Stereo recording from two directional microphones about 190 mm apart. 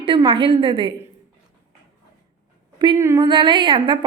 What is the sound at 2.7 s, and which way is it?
A woman's voice, 20° right (ahead or behind).